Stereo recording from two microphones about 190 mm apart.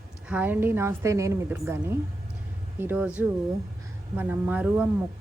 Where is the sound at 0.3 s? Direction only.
10° right (ahead or behind).